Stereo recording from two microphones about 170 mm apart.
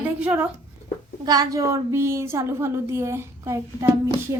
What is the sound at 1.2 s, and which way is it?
A woman's voice, 20° right (ahead or behind).